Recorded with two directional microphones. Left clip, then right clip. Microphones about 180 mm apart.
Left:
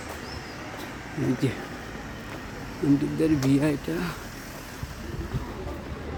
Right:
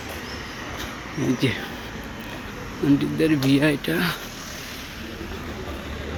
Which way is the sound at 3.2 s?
5° left (ahead or behind).